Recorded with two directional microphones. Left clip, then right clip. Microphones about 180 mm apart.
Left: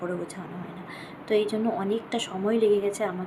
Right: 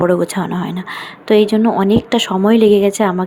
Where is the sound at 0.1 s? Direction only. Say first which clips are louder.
Right 18 dB; 60° right (ahead or behind).